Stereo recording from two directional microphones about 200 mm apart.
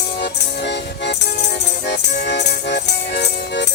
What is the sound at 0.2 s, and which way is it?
Music, 60° left (ahead or behind).